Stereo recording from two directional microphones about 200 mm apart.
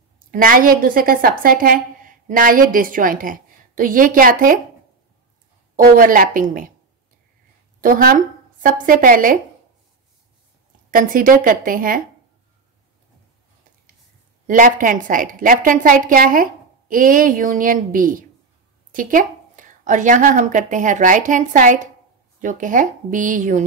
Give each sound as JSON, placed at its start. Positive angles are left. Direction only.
{"t": 0.3, "sound": "a woman's voice", "side_deg": -45}
{"t": 5.8, "sound": "a woman's voice", "side_deg": -45}
{"t": 7.8, "sound": "speech", "side_deg": -45}
{"t": 10.9, "sound": "a woman's voice", "side_deg": -45}
{"t": 14.5, "sound": "a woman's voice", "side_deg": -40}